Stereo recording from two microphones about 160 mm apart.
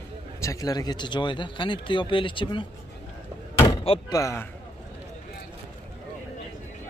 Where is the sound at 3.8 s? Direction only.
25° left (ahead or behind).